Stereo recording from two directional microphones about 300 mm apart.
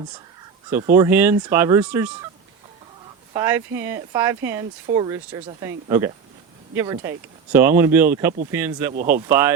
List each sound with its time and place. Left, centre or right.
0.9 s speech: centre
3.3 s speech: centre
8.9 s speech: right
9.4 s speech: centre